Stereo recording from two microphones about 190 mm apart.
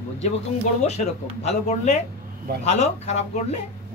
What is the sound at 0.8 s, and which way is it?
Speech, 35° left (ahead or behind).